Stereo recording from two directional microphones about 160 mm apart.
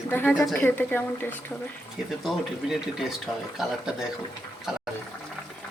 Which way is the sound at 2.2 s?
Centre (ahead or behind).